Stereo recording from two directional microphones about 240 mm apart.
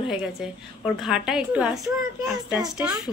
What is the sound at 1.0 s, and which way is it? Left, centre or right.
Speech, centre.